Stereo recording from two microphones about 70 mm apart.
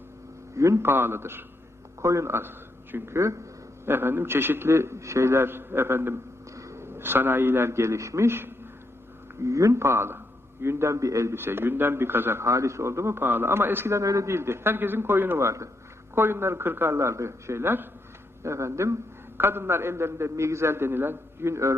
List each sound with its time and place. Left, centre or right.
0.5 s a man's voice: right
0.9 s a man's voice: right
2.0 s a man's voice: right
3.8 s a man's voice: right
9.4 s a man's voice: right
13.9 s a man's voice: right
18.4 s a man's voice: right
19.4 s a man's voice: right